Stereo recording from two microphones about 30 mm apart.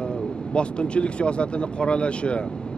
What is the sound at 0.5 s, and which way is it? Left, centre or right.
Speech, left.